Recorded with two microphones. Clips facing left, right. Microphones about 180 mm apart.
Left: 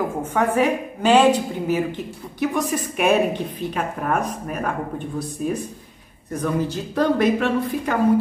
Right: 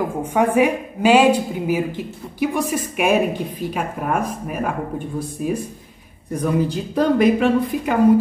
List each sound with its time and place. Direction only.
0.2 s a woman's voice: 15° right (ahead or behind)